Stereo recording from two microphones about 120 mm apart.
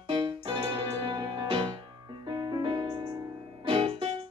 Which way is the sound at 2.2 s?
35° right (ahead or behind).